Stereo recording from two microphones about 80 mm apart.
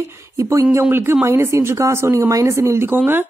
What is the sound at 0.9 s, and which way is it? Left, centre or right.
Speech, right.